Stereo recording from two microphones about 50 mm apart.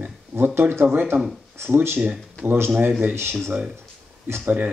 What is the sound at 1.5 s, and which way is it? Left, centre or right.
Speech, right.